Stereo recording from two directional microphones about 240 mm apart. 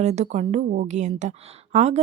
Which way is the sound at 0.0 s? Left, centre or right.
Right.